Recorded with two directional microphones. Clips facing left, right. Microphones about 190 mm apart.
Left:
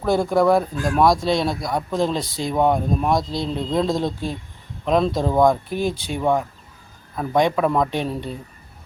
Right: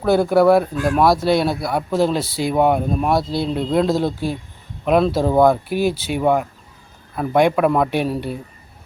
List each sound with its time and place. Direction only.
0.0 s speech: 5° right (ahead or behind)